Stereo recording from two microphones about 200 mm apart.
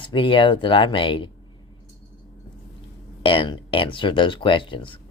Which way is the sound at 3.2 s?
25° left (ahead or behind).